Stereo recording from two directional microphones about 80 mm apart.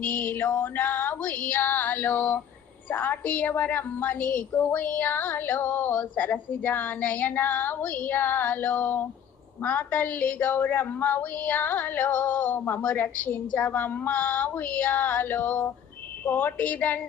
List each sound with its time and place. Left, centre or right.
0.0 s a woman's voice: left